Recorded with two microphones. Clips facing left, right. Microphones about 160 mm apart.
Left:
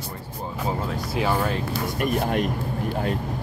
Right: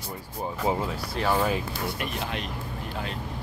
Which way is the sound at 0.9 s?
5° left (ahead or behind).